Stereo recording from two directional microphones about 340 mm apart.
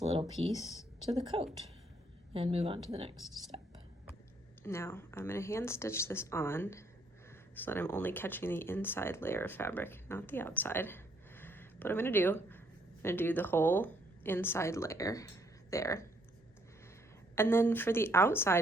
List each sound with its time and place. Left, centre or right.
0.0 s speech: centre
4.6 s speech: centre
17.3 s speech: centre